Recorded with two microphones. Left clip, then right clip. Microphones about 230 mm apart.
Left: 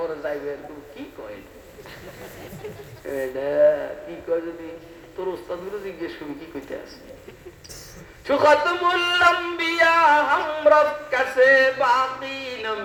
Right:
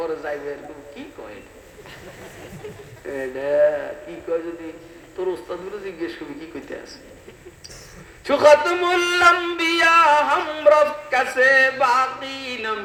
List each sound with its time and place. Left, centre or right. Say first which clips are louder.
0.0 s a sound: right 1 dB; right
3.1 s speech: right 2 dB; right
8.2 s speech: right 3 dB; right